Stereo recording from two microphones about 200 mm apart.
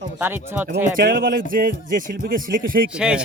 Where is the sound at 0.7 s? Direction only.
45° right (ahead or behind).